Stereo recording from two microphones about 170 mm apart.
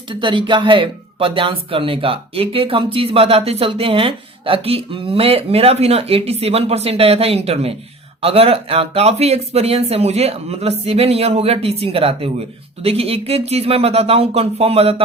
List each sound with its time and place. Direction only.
0.1 s speech: 30° right (ahead or behind)